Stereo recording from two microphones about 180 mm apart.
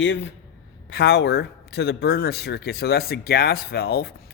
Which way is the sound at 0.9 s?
65° left (ahead or behind).